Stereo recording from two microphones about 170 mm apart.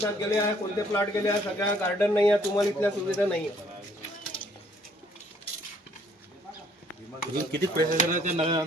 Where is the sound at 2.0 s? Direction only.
10° left (ahead or behind).